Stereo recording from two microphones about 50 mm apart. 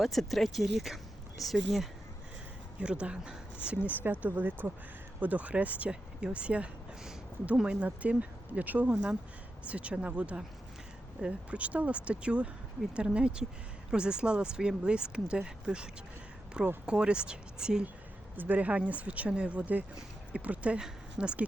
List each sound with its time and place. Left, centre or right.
0.0 s speech: centre
2.8 s speech: right
3.8 s speech: right
5.9 s speech: centre
8.9 s speech: centre
18.3 s speech: right